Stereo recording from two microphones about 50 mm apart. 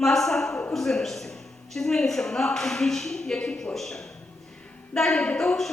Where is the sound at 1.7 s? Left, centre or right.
Centre.